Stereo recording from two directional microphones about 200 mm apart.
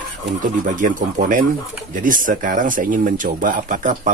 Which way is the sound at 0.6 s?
40° right (ahead or behind).